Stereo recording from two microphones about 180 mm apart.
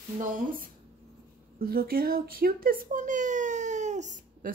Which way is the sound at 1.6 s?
60° right (ahead or behind).